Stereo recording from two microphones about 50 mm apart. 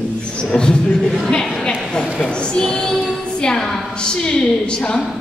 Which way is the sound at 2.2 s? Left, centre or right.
Centre.